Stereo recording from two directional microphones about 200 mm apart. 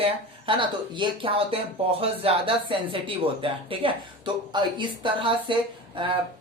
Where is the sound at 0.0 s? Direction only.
25° right (ahead or behind).